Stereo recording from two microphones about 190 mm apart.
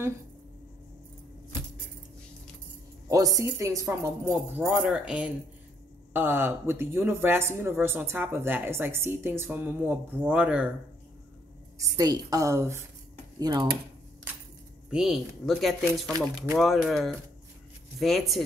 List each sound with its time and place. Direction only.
3.1 s speech: 20° right (ahead or behind)
11.8 s speech: 20° right (ahead or behind)
14.9 s speech: 5° right (ahead or behind)